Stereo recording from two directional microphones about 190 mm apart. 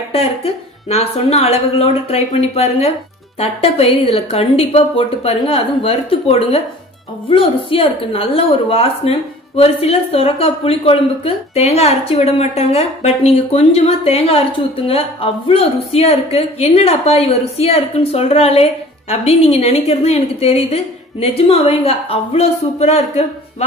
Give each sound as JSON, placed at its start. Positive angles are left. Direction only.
{"t": 0.1, "sound": "a woman's voice", "side_deg": 30}